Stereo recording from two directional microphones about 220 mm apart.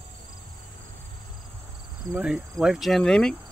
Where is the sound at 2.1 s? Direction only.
5° right (ahead or behind).